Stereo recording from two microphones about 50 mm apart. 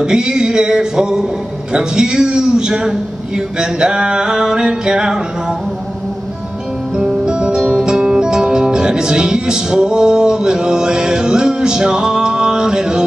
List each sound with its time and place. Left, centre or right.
0.0 s a man's voice: centre
7.0 s music: centre